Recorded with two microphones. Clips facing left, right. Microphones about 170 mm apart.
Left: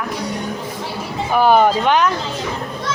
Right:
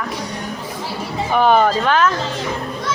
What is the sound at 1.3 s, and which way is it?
Speech, 5° left (ahead or behind).